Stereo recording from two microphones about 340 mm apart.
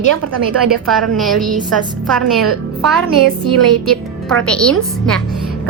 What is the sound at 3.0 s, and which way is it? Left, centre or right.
Speech, right.